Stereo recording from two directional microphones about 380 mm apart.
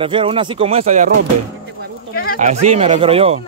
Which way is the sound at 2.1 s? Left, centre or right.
Left.